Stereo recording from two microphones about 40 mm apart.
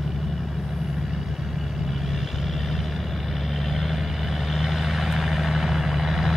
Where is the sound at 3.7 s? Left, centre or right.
Centre.